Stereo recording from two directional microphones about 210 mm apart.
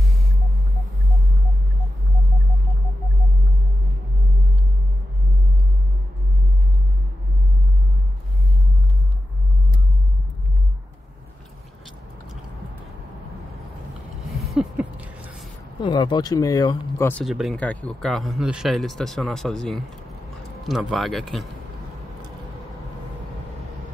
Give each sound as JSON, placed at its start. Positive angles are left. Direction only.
{"t": 14.5, "sound": "a sound", "side_deg": -5}
{"t": 15.8, "sound": "speech", "side_deg": 20}
{"t": 17.1, "sound": "speech", "side_deg": 0}